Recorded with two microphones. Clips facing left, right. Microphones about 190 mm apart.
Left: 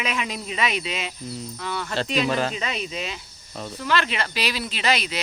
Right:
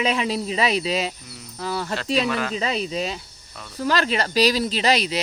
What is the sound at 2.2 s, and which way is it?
Speech, 35° left (ahead or behind).